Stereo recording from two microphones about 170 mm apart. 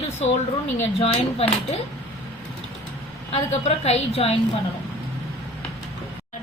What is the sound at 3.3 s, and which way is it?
A woman's voice, 40° left (ahead or behind).